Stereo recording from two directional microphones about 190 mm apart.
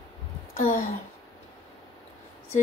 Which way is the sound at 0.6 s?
40° left (ahead or behind).